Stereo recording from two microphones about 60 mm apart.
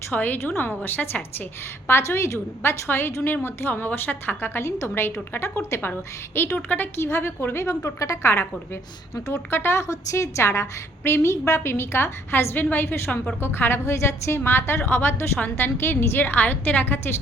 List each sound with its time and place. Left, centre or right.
0.1 s a woman's voice: left
1.9 s a woman's voice: left
4.6 s a woman's voice: left
7.0 s a woman's voice: left
7.9 s a woman's voice: left
9.1 s speech: left
9.5 s a woman's voice: left